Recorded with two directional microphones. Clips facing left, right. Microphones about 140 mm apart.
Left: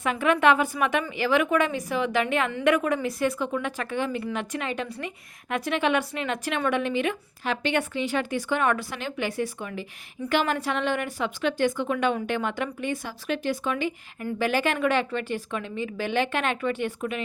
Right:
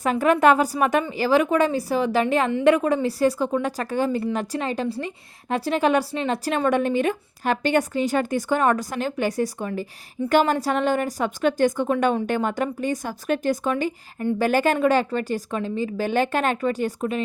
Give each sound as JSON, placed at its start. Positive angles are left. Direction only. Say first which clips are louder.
{"t": 0.0, "sound": "a woman's voice", "louder": "right 4 dB", "side_deg": -40}